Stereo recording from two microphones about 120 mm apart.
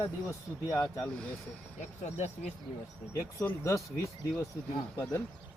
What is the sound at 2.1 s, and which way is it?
Speech, 70° left (ahead or behind).